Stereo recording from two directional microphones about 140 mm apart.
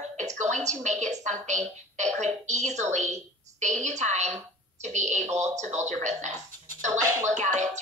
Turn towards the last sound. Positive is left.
turn(degrees=-60)  # may be behind; listen again after turning